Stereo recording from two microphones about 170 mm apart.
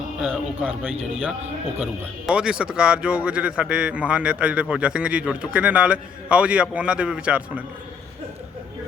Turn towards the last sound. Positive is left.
turn(degrees=-5)  # may be behind; listen again after turning